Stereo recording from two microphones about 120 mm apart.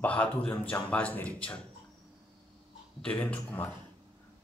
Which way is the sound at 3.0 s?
10° left (ahead or behind).